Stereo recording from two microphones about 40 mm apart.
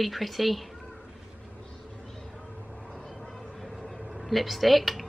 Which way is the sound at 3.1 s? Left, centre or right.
Centre.